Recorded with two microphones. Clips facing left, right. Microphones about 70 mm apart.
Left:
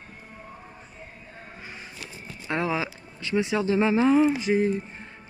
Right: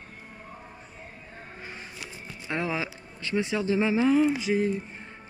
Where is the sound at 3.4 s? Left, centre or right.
Left.